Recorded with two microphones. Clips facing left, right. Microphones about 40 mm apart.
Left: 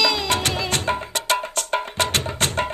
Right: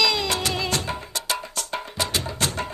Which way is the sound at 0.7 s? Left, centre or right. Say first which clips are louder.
Left 4 dB; left.